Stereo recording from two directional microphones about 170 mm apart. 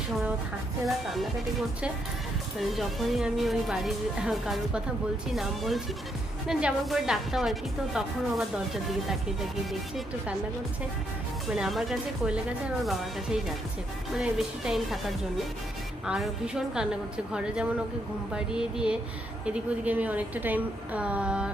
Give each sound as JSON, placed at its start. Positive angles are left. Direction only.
{"t": 0.9, "sound": "speech", "side_deg": 0}
{"t": 2.6, "sound": "speech", "side_deg": 0}
{"t": 11.4, "sound": "speech", "side_deg": 0}
{"t": 14.2, "sound": "a woman's voice", "side_deg": 0}